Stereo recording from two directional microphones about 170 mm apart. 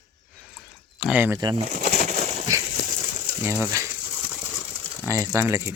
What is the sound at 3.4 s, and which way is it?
Speech, 15° right (ahead or behind).